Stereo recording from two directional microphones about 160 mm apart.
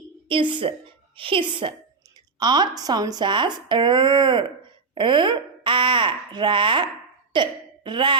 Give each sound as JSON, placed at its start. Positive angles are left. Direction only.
{"t": 0.3, "sound": "a woman's voice", "side_deg": -30}